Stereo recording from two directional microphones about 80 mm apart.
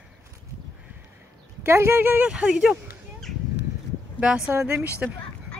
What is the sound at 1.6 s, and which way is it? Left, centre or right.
Speech, right.